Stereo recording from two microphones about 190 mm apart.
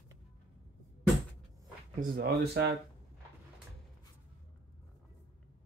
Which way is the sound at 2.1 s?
55° right (ahead or behind).